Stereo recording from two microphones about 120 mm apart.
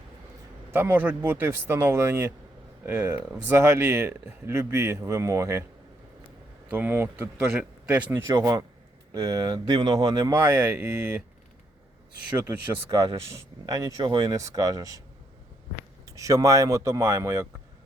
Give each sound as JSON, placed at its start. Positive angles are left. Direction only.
{"t": 0.7, "sound": "speech", "side_deg": -15}
{"t": 6.7, "sound": "speech", "side_deg": -15}
{"t": 8.4, "sound": "a man's voice", "side_deg": -35}
{"t": 10.3, "sound": "speech", "side_deg": -15}
{"t": 12.4, "sound": "speech", "side_deg": -15}
{"t": 16.0, "sound": "speech", "side_deg": -25}